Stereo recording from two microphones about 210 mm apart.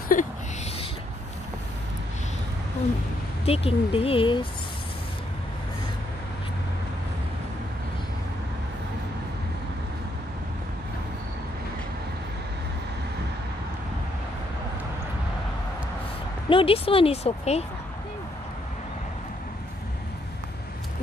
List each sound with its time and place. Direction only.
0.1 s a sound: 40° left (ahead or behind)
3.4 s speech: 30° left (ahead or behind)
16.4 s speech: 25° left (ahead or behind)